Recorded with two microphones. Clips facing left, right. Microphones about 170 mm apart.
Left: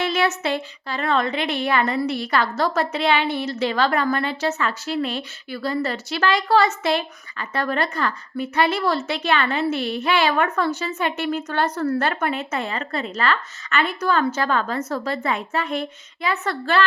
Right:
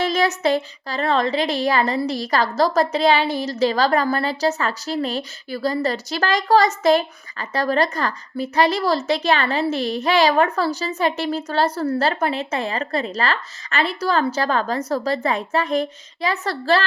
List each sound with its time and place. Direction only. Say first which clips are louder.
0.0 s a woman's voice: right 3 dB; 40° right (ahead or behind)